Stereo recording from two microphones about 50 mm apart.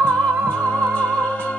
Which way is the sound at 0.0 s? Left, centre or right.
Left.